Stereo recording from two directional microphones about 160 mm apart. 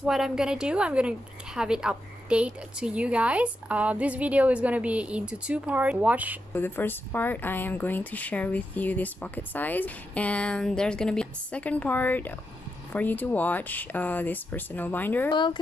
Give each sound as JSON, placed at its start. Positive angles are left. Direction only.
{"t": 0.0, "sound": "a woman's voice", "side_deg": -5}
{"t": 6.5, "sound": "speech", "side_deg": 15}
{"t": 15.3, "sound": "speech", "side_deg": 30}